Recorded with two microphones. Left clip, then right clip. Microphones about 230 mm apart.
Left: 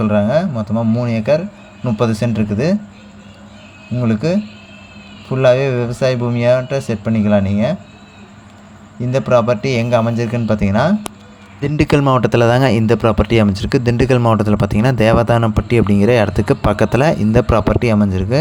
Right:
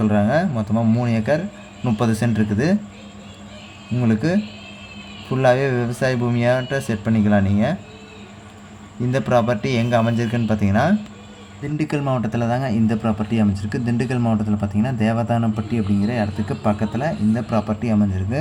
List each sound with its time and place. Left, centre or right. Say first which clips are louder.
0.0 s speech: left 4 dB; centre
4.0 s speech: left 4 dB; centre
9.0 s speech: left 5 dB; centre
11.6 s speech: left 9 dB; left